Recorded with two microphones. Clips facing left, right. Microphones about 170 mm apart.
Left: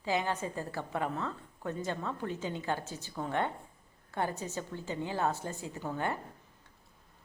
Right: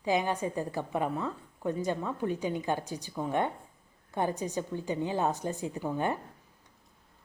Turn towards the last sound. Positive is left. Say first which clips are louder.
# right 4 dB
turn(degrees=-15)  # may be behind; listen again after turning